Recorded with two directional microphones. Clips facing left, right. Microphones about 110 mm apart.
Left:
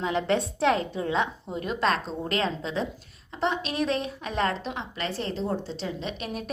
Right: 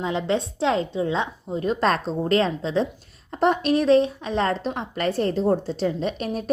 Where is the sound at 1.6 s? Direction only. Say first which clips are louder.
Right 4 dB; 40° right (ahead or behind).